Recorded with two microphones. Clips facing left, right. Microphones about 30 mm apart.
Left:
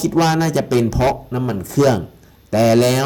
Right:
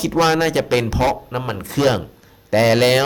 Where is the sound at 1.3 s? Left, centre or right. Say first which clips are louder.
Left 3 dB; right.